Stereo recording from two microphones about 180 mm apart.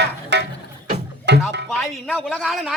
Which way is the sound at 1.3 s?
75° right (ahead or behind).